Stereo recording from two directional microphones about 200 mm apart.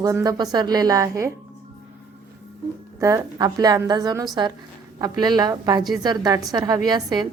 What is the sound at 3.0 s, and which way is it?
A woman's voice, 15° right (ahead or behind).